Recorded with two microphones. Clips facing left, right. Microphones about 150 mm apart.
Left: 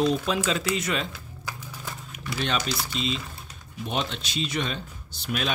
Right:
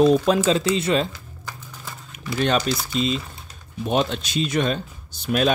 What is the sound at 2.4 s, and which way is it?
Speech, 45° right (ahead or behind).